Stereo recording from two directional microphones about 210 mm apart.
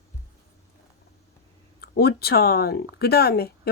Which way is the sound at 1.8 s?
45° left (ahead or behind).